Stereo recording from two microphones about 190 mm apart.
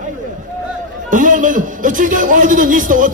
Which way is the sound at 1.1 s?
45° right (ahead or behind).